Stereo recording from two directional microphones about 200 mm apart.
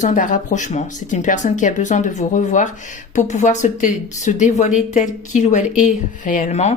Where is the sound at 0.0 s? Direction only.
40° left (ahead or behind).